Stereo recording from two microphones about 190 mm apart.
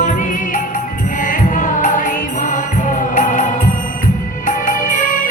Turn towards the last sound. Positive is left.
turn(degrees=45)  # may be behind; listen again after turning